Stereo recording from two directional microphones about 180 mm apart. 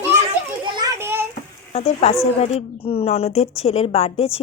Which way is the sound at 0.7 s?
15° right (ahead or behind).